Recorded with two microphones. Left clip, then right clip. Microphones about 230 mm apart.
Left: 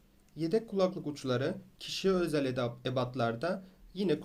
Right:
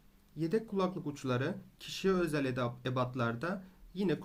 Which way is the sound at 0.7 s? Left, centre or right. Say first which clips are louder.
Left 4 dB; right.